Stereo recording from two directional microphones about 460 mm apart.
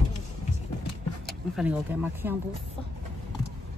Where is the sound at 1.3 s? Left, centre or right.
Centre.